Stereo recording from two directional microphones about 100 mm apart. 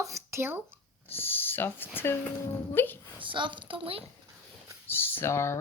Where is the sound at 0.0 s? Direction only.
30° right (ahead or behind).